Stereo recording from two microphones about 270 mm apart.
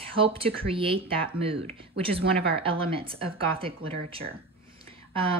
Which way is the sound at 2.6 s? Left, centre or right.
Centre.